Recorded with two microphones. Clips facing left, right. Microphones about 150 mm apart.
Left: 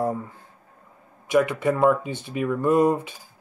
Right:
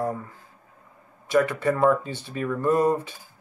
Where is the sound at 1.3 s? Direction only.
15° left (ahead or behind).